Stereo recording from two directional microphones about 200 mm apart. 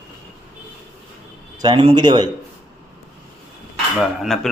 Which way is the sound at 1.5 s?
20° right (ahead or behind).